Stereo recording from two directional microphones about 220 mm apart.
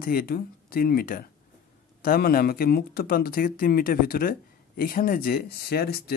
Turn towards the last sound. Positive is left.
turn(degrees=45)  # may be behind; listen again after turning